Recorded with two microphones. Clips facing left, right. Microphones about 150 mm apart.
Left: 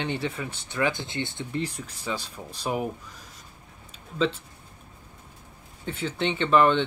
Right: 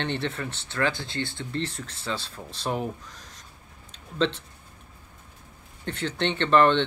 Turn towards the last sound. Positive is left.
turn(degrees=5)  # may be behind; listen again after turning